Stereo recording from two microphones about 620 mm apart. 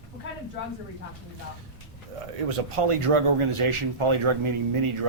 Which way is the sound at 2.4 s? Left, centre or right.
Right.